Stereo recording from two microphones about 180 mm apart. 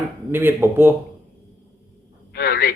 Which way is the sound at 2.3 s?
60° left (ahead or behind).